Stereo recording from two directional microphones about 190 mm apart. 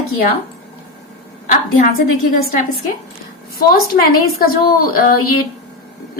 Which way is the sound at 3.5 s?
50° left (ahead or behind).